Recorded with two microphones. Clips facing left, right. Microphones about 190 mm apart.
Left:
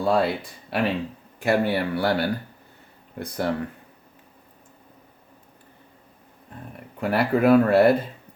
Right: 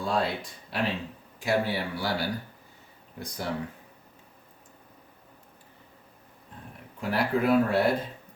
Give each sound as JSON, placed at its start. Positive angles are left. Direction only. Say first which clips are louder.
{"t": 0.0, "sound": "speech", "louder": "left 6 dB", "side_deg": 60}
{"t": 7.0, "sound": "speech", "louder": "left 6 dB", "side_deg": 60}